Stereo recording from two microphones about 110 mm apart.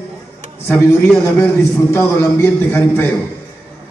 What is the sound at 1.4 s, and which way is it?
A man's voice, 25° left (ahead or behind).